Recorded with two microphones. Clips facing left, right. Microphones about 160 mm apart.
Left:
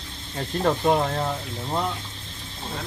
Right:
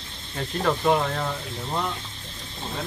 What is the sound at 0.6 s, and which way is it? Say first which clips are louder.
Speech: left 1 dB; 25° left (ahead or behind).